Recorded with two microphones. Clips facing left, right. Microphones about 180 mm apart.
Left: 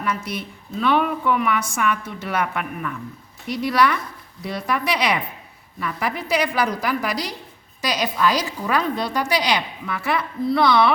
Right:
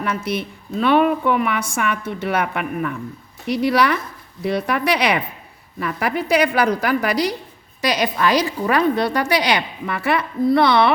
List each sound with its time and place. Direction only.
0.0 s a woman's voice: 60° right (ahead or behind)